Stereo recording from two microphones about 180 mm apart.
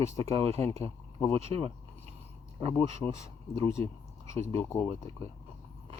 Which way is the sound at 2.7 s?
15° left (ahead or behind).